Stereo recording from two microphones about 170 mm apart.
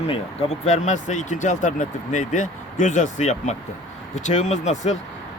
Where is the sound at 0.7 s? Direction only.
45° left (ahead or behind).